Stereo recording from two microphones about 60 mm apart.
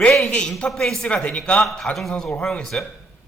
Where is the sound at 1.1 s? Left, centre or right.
Centre.